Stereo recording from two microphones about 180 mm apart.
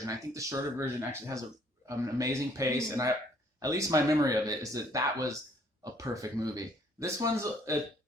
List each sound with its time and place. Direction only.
0.0 s speech: 20° right (ahead or behind)
1.9 s speech: 20° right (ahead or behind)